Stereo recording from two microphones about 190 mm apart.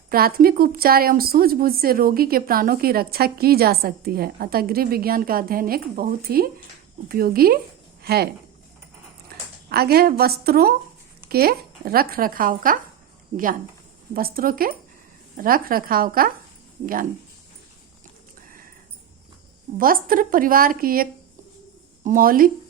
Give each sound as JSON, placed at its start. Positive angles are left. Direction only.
{"t": 0.1, "sound": "a woman's voice", "side_deg": -50}
{"t": 9.6, "sound": "a woman's voice", "side_deg": -55}
{"t": 19.8, "sound": "a woman's voice", "side_deg": -50}